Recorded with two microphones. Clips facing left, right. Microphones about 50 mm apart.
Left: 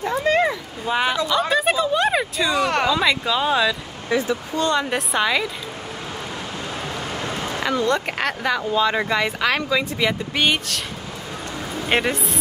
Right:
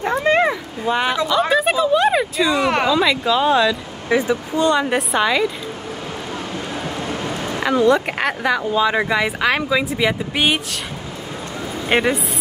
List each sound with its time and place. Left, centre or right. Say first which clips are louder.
0.2 s cat: right 2 dB; right
0.8 s speech: right 2 dB; centre
4.1 s speech: right 4 dB; centre
4.6 s speech: right 4 dB; centre
7.6 s speech: right 6 dB; centre
11.9 s speech: right 3 dB; centre